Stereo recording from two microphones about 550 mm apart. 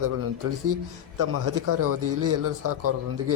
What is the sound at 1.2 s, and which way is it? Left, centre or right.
A man's voice, right.